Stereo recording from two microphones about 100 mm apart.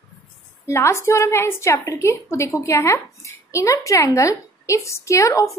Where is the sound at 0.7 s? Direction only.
25° left (ahead or behind).